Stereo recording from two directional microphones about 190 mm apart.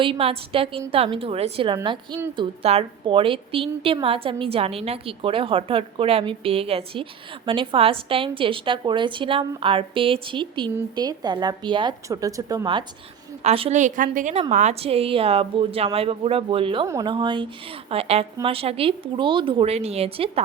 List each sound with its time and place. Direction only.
0.0 s a woman's voice: 30° right (ahead or behind)
13.4 s a woman's voice: 35° right (ahead or behind)